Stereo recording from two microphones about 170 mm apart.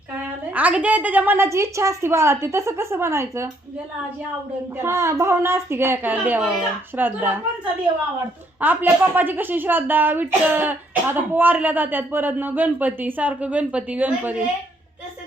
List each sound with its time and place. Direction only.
0.5 s a woman's voice: 10° right (ahead or behind)
4.8 s a woman's voice: 15° right (ahead or behind)
8.6 s a woman's voice: 10° right (ahead or behind)